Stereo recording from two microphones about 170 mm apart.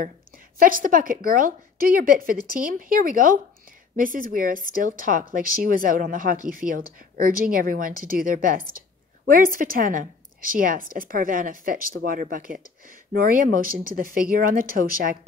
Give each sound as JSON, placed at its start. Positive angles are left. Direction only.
{"t": 0.6, "sound": "a woman's voice", "side_deg": -55}